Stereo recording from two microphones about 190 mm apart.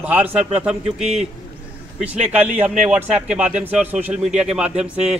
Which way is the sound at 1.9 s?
35° right (ahead or behind).